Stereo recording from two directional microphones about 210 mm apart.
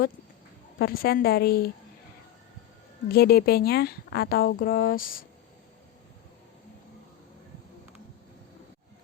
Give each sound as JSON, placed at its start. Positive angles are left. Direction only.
{"t": 0.8, "sound": "a woman's voice", "side_deg": 45}
{"t": 3.1, "sound": "a woman's voice", "side_deg": 45}